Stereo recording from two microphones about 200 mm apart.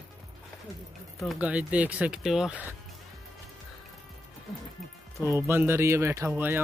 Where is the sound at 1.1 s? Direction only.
5° right (ahead or behind).